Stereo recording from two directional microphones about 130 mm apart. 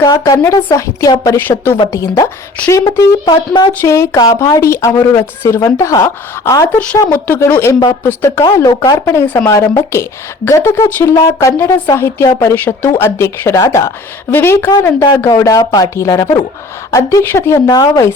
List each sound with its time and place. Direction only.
0.0 s speech: 30° left (ahead or behind)
3.7 s speech: 20° left (ahead or behind)
15.3 s speech: 25° left (ahead or behind)